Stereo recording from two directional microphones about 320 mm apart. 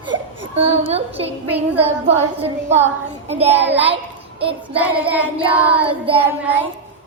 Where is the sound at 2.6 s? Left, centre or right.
Centre.